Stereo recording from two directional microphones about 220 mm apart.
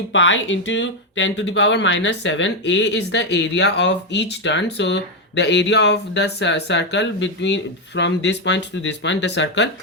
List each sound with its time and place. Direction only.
0.1 s speech: 60° left (ahead or behind)